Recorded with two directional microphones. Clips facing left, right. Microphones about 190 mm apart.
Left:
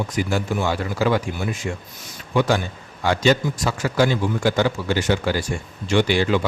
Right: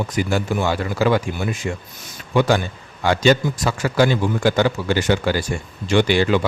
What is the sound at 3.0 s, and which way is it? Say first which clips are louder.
Speech: right 2 dB; 65° right (ahead or behind).